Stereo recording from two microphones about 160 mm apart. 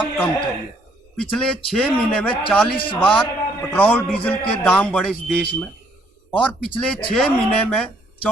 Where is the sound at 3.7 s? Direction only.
10° left (ahead or behind).